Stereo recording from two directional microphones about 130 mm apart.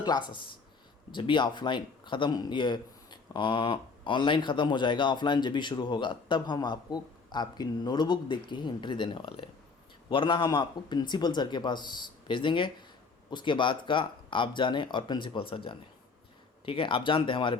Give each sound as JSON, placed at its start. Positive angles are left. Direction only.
{"t": 0.0, "sound": "speech", "side_deg": 35}